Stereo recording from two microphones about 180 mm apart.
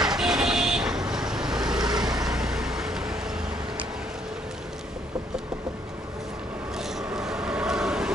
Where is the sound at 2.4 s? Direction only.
5° right (ahead or behind).